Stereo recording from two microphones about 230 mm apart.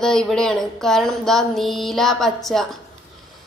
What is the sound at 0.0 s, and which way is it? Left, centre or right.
A woman's voice, centre.